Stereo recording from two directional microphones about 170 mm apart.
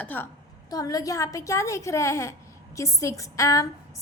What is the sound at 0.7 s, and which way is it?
A woman's voice, 20° left (ahead or behind).